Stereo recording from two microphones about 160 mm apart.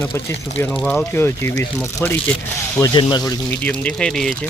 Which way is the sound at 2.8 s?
30° left (ahead or behind).